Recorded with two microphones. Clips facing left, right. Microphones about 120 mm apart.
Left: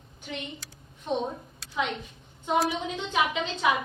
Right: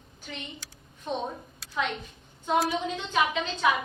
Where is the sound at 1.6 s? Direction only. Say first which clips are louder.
Even; centre (ahead or behind).